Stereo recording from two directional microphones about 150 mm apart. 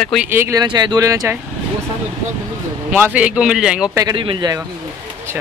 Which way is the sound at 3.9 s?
25° right (ahead or behind).